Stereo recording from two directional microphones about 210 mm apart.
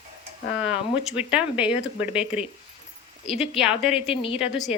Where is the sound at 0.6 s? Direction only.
5° right (ahead or behind).